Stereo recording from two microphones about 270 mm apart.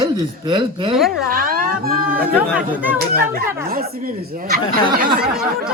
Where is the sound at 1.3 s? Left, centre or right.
Right.